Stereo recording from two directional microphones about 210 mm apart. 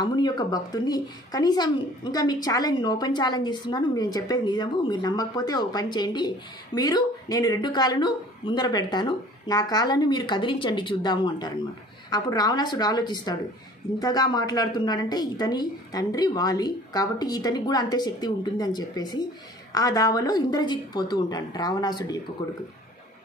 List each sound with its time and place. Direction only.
0.0 s speech: 20° left (ahead or behind)